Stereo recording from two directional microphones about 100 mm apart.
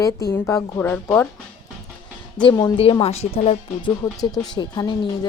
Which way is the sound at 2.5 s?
40° left (ahead or behind).